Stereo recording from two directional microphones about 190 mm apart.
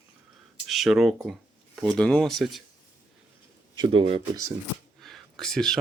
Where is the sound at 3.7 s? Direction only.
25° right (ahead or behind).